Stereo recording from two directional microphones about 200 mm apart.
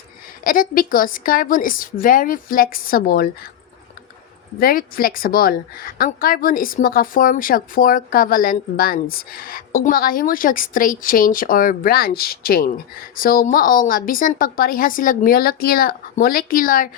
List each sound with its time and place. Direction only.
0.4 s a woman's voice: 45° left (ahead or behind)
4.6 s a woman's voice: 45° left (ahead or behind)